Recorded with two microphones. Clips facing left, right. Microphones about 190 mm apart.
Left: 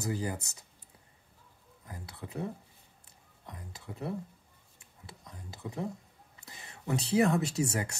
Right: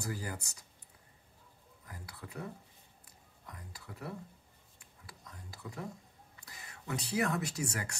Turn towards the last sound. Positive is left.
turn(degrees=25)  # may be behind; listen again after turning